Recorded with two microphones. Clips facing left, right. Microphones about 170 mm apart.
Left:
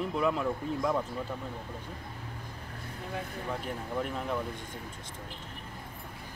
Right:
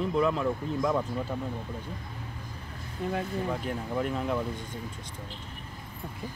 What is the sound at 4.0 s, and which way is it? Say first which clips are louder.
Speech: right 4 dB; centre (ahead or behind).